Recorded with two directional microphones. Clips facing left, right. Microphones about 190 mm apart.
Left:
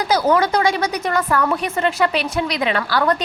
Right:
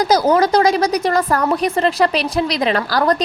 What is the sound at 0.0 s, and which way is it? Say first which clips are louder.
A woman's voice: right 3 dB; 40° right (ahead or behind).